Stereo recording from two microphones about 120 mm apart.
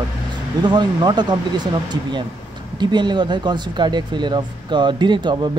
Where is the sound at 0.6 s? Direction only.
40° right (ahead or behind).